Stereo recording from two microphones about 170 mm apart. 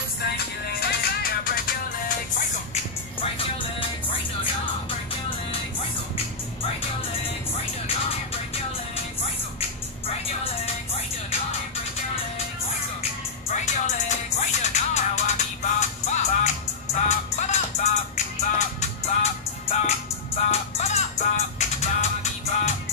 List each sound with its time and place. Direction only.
0.2 s music: 70° left (ahead or behind)
13.5 s music: 45° left (ahead or behind)